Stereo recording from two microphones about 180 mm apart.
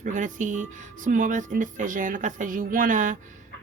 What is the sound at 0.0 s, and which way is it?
Speech, 45° right (ahead or behind).